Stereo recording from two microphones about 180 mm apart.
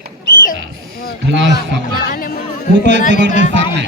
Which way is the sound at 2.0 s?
50° left (ahead or behind).